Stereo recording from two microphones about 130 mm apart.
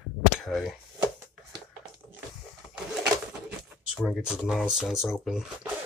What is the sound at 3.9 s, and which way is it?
Speech, 5° right (ahead or behind).